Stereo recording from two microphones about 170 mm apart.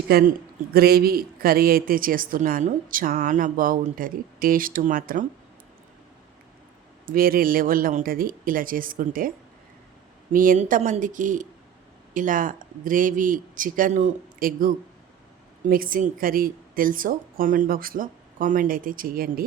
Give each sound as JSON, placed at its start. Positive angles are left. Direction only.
{"t": 0.1, "sound": "a man's voice", "side_deg": -65}
{"t": 7.0, "sound": "a man's voice", "side_deg": -55}
{"t": 10.3, "sound": "speech", "side_deg": -55}
{"t": 15.7, "sound": "a man's voice", "side_deg": -55}